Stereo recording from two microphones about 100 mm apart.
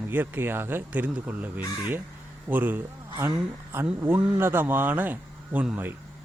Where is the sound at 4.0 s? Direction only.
20° right (ahead or behind).